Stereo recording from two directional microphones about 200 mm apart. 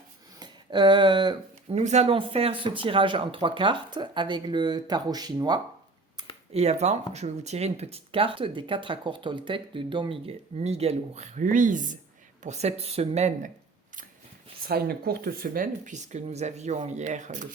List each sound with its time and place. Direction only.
0.3 s speech: 20° right (ahead or behind)
1.8 s speech: 35° right (ahead or behind)
6.5 s speech: 30° right (ahead or behind)
14.7 s speech: 50° right (ahead or behind)